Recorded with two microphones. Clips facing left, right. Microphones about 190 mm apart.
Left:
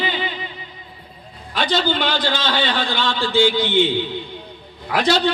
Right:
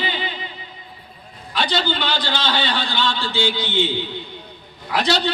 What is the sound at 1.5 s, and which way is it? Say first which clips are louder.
A man's voice: left 2 dB; 50° left (ahead or behind).